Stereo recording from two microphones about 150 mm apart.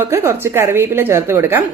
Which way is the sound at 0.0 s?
15° right (ahead or behind).